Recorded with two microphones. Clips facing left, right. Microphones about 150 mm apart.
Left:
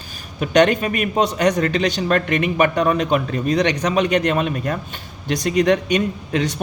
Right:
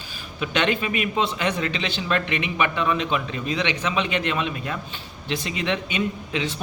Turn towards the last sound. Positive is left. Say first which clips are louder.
# left 5 dB
turn(degrees=50)  # may be behind; listen again after turning